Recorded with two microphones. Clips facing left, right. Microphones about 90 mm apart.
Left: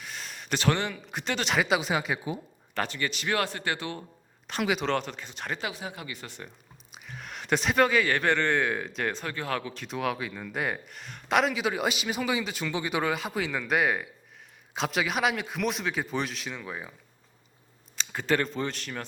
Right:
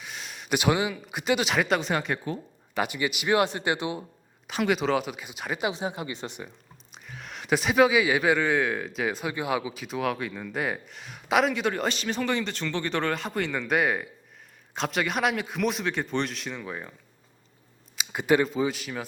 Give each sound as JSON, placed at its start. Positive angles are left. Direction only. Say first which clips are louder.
{"t": 0.0, "sound": "speech", "louder": "right 1 dB", "side_deg": -5}
{"t": 2.7, "sound": "speech", "louder": "right 3 dB", "side_deg": -10}
{"t": 4.4, "sound": "a man's voice", "louder": "right 3 dB", "side_deg": 0}
{"t": 5.6, "sound": "speech", "louder": "right 6 dB", "side_deg": -20}
{"t": 6.9, "sound": "a man's voice", "louder": "even", "side_deg": 0}
{"t": 17.9, "sound": "a man's voice", "louder": "right 4 dB", "side_deg": -15}